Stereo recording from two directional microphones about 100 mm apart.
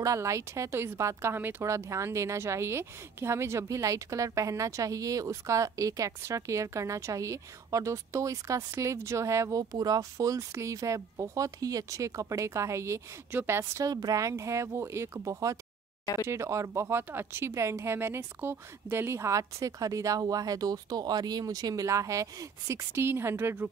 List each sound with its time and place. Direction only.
0.0 s speech: 30° right (ahead or behind)
13.8 s speech: 40° right (ahead or behind); by 23.7 s 25° right (ahead or behind)